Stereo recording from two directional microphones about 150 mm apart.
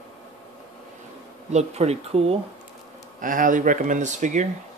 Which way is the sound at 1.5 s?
45° right (ahead or behind).